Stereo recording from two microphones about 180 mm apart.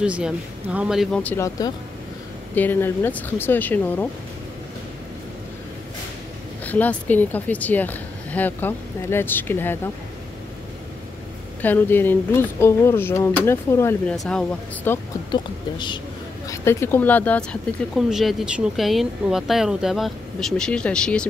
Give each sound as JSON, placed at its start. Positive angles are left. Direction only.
{"t": 0.0, "sound": "speech", "side_deg": -5}
{"t": 1.2, "sound": "speech", "side_deg": 15}
{"t": 6.6, "sound": "speech", "side_deg": 10}
{"t": 11.6, "sound": "speech", "side_deg": 10}
{"t": 15.3, "sound": "a woman's voice", "side_deg": 25}
{"t": 16.4, "sound": "speech", "side_deg": 15}